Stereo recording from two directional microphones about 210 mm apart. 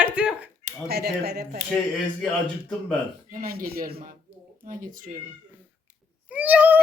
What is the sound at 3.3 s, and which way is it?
A woman's voice, 45° right (ahead or behind).